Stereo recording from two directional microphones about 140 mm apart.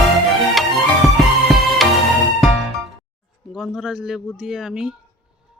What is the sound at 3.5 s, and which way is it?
Speech, centre (ahead or behind).